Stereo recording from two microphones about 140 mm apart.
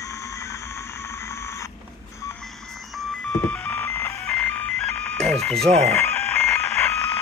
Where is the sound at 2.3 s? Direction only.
5° left (ahead or behind).